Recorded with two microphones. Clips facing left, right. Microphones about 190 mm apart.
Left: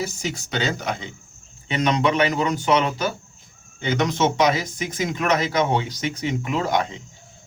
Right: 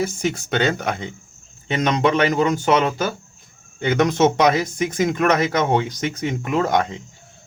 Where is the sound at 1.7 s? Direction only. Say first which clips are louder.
Right 2 dB; 45° right (ahead or behind).